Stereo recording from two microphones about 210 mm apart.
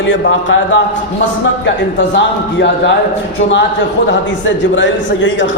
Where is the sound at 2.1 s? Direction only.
55° left (ahead or behind).